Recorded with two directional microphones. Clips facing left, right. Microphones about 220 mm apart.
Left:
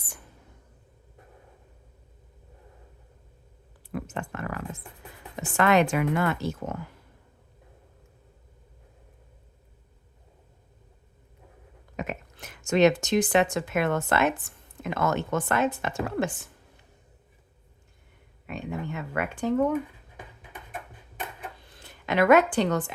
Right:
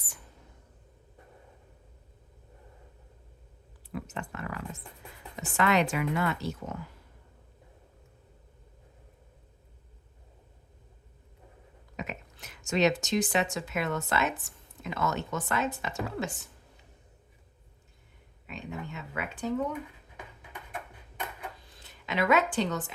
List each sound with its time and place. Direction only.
3.9 s speech: 50° left (ahead or behind)
11.9 s a woman's voice: 50° left (ahead or behind)
18.4 s a sound: 55° left (ahead or behind)
21.8 s speech: 55° left (ahead or behind)